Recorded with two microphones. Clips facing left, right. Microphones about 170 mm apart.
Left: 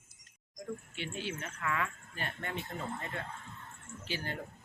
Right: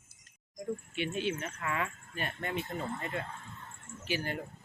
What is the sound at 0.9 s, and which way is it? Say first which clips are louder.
Speech: right 6 dB; 20° right (ahead or behind).